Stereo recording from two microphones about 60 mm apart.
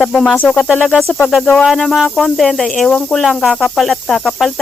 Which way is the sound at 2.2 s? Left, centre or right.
Centre.